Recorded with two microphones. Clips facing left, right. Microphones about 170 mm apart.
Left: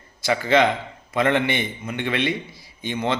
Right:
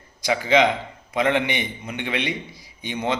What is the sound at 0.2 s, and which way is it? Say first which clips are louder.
A man's voice: even; 15° right (ahead or behind).